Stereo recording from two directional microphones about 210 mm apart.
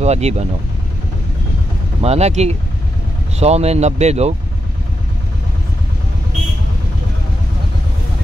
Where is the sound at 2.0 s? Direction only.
30° right (ahead or behind).